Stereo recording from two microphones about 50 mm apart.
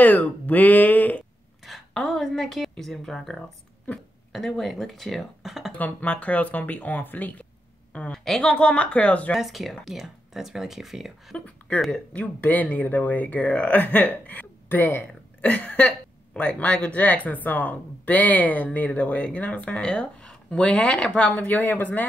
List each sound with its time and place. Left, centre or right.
0.0 s speech: left
1.6 s a sound: centre
2.7 s speech: centre
5.7 s speech: left
8.1 s speech: centre
9.3 s speech: centre
11.3 s speech: left
12.4 s speech: left
15.4 s speech: left
21.5 s speech: left